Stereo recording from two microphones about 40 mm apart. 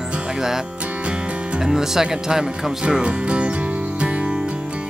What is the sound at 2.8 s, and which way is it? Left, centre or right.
Music, right.